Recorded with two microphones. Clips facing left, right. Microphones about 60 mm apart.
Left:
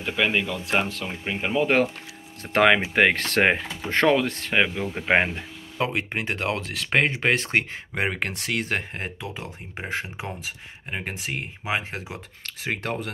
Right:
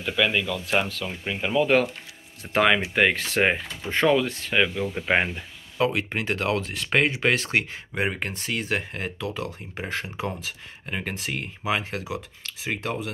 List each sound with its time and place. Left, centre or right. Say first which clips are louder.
0.0 s speech: even; left
2.4 s speech: left 2 dB; left
4.9 s speech: left 5 dB; left
8.0 s speech: left 1 dB; left
8.9 s speech: right 3 dB; left
12.4 s speech: left 1 dB; left